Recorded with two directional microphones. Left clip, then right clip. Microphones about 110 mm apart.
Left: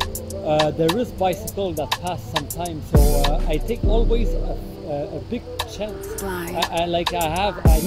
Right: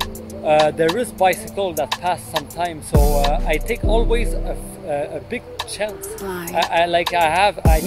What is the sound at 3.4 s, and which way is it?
Speech, 25° left (ahead or behind).